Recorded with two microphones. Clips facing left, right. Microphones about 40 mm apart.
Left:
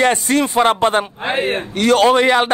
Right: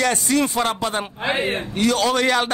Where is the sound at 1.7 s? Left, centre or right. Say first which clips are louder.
Left 6 dB; left.